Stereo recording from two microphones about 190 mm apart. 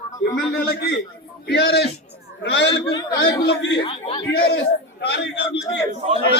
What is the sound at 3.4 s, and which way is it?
Speech, 65° left (ahead or behind).